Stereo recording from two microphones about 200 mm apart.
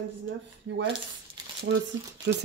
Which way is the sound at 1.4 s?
20° right (ahead or behind).